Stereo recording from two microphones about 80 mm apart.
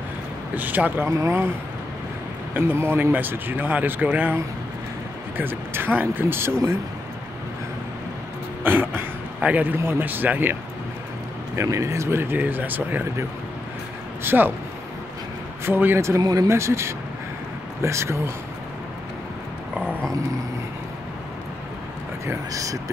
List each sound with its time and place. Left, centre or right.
0.6 s a man's voice: right
1.0 s speech: right
2.5 s a man's voice: right
5.4 s a man's voice: right
8.6 s a man's voice: right
11.5 s a man's voice: right
14.2 s a man's voice: right
15.6 s a man's voice: right
16.2 s speech: right
16.4 s speech: right
22.2 s speech: right